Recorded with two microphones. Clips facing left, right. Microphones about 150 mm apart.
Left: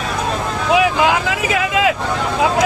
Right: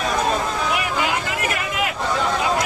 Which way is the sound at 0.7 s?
90° left.